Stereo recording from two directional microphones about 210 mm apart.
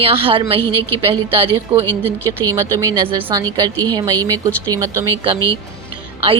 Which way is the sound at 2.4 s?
15° right (ahead or behind).